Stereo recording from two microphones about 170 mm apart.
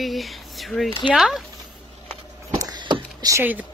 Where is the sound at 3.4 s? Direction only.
10° right (ahead or behind).